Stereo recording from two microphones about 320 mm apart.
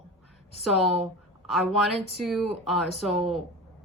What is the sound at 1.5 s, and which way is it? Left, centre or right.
Speech, centre.